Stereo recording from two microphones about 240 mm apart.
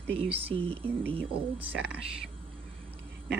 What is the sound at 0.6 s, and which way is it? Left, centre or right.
Speech, centre.